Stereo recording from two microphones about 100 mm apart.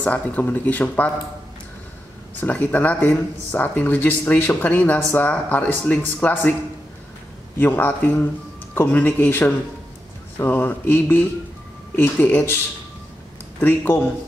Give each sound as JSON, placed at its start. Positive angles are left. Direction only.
{"t": 0.0, "sound": "speech", "side_deg": 15}
{"t": 2.4, "sound": "speech", "side_deg": 15}
{"t": 7.5, "sound": "mantra", "side_deg": 20}
{"t": 13.6, "sound": "mantra", "side_deg": 20}